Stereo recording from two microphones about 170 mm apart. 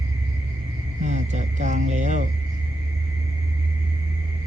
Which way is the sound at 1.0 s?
45° right (ahead or behind).